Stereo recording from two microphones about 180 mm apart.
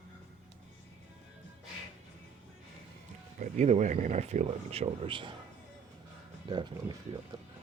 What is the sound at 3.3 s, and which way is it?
Speech, 40° right (ahead or behind).